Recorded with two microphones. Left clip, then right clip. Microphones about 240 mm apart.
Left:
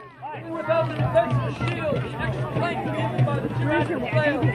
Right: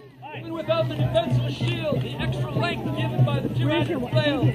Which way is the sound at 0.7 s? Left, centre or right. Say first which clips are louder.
Left 2 dB; left.